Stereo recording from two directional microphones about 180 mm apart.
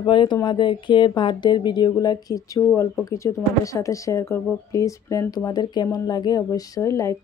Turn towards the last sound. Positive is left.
turn(degrees=15)  # may be behind; listen again after turning